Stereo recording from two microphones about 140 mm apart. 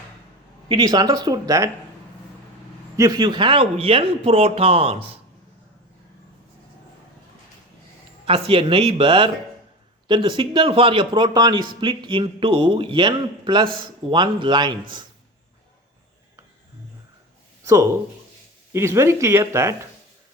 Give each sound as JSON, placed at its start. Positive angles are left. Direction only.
{"t": 0.7, "sound": "speech", "side_deg": -30}
{"t": 2.9, "sound": "speech", "side_deg": -30}
{"t": 8.2, "sound": "a man's voice", "side_deg": -40}
{"t": 18.7, "sound": "speech", "side_deg": -20}